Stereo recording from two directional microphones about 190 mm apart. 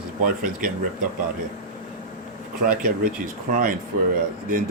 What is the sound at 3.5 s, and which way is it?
Speech, 45° right (ahead or behind).